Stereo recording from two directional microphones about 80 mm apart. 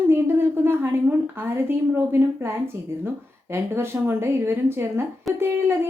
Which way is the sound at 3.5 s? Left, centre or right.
Right.